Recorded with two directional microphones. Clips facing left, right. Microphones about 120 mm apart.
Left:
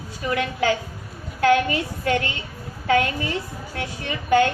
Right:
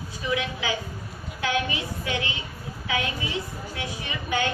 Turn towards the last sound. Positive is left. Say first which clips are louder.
# left 8 dB
turn(degrees=50)  # may be behind; listen again after turning